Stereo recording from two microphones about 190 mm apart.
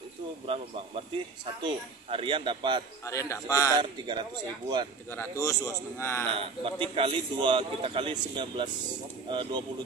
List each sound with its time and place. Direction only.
1.6 s a man's voice: 25° right (ahead or behind)
3.1 s a man's voice: 15° left (ahead or behind)
3.7 s a man's voice: 25° right (ahead or behind)
5.1 s a man's voice: 15° left (ahead or behind)
6.3 s a man's voice: 30° right (ahead or behind)